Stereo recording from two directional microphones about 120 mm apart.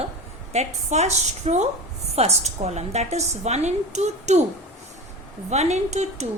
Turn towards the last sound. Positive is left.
turn(degrees=-70)  # may be behind; listen again after turning